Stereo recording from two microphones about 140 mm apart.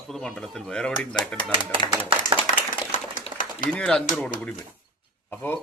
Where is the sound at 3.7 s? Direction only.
5° left (ahead or behind).